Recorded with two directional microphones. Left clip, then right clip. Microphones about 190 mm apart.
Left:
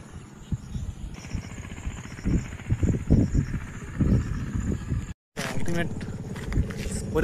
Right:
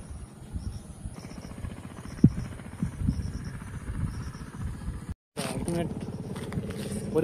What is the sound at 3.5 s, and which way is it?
Vehicle, 55° right (ahead or behind).